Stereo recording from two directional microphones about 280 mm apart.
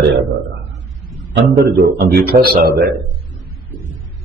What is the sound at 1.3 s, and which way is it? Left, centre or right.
A man's voice, right.